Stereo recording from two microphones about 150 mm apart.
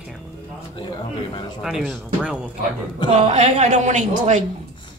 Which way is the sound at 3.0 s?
50° right (ahead or behind).